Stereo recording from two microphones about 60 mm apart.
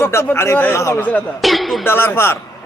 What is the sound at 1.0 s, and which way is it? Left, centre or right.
Speech, left.